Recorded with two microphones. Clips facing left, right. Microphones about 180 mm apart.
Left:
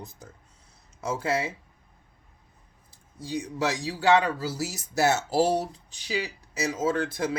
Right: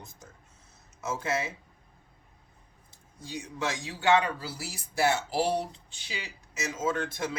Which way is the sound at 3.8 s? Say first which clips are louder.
Left 2 dB; 35° left (ahead or behind).